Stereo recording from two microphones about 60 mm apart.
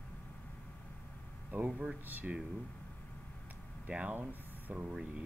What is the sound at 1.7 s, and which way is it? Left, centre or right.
Speech, centre.